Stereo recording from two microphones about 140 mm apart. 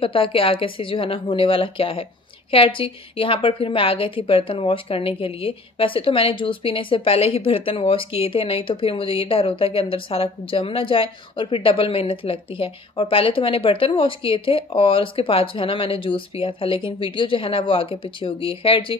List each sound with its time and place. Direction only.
0.0 s a woman's voice: 40° left (ahead or behind)